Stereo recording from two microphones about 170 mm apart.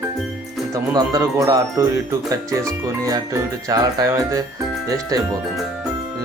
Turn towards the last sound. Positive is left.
turn(degrees=-20)  # may be behind; listen again after turning